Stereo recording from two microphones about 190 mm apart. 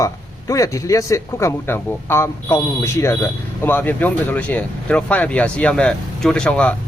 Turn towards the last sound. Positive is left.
turn(degrees=5)  # may be behind; listen again after turning